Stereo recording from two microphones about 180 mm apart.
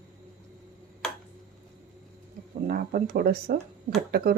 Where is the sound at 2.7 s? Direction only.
55° right (ahead or behind).